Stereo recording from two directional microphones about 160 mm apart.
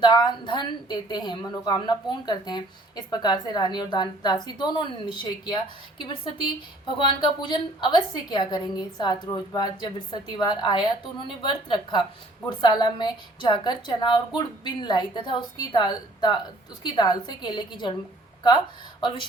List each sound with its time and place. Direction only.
0.0 s a woman's voice: 30° left (ahead or behind)